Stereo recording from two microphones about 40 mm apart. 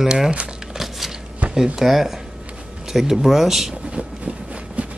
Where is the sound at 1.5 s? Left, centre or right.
Centre.